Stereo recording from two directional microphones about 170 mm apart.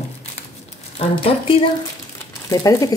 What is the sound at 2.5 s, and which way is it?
Speech, 20° left (ahead or behind).